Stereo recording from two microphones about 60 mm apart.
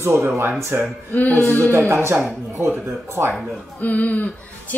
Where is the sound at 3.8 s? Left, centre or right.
Left.